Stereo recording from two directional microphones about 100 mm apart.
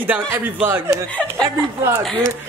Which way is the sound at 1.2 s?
5° left (ahead or behind).